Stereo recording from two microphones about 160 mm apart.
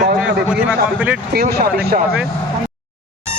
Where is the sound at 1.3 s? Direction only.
80° right.